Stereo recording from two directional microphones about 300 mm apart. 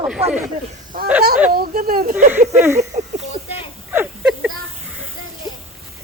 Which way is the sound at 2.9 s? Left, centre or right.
Right.